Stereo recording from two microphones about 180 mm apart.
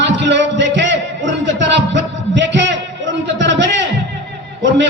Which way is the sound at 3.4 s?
85° right.